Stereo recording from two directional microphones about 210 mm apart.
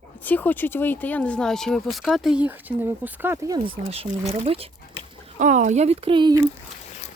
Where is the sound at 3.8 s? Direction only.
30° right (ahead or behind).